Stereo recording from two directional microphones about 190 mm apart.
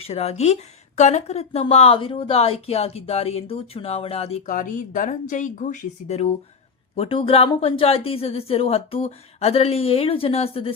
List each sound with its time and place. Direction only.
0.0 s a woman's voice: 35° left (ahead or behind)